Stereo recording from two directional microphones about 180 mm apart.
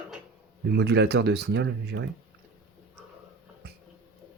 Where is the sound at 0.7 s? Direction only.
70° right (ahead or behind).